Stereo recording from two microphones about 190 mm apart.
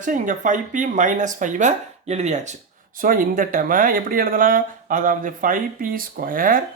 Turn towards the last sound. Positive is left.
turn(degrees=-45)  # may be behind; listen again after turning